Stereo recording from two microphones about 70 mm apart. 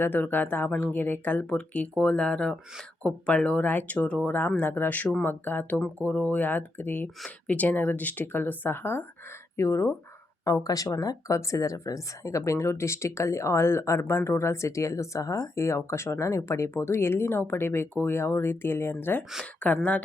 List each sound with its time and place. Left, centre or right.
0.0 s speech: left
10.4 s a woman's voice: left
19.5 s speech: left